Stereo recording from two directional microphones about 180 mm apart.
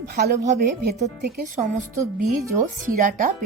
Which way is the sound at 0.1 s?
65° right (ahead or behind).